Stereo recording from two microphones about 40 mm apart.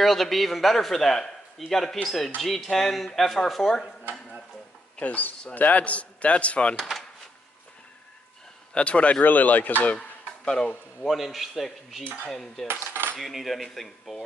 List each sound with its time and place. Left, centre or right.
0.0 s speech: centre
1.7 s cutlery: centre
2.0 s speech: centre
5.0 s speech: left
6.8 s drawer open or close: centre
8.7 s speech: left
9.2 s speech: left
9.9 s a sound: left
11.1 s speech: centre
12.3 s cutlery: centre
13.2 s speech: centre